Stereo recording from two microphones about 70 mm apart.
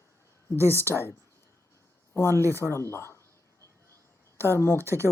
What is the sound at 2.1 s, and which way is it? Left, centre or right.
Speech, left.